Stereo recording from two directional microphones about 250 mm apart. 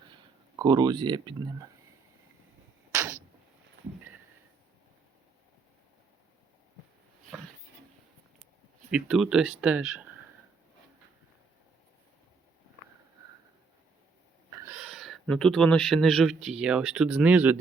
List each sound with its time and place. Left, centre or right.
0.1 s speech: centre
2.9 s a sound: centre
8.9 s speech: centre
14.6 s speech: centre